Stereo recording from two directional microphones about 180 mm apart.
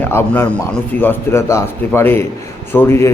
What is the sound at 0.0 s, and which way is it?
A man's voice, 10° left (ahead or behind).